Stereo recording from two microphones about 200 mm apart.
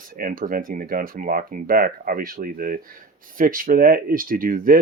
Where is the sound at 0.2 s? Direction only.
45° right (ahead or behind).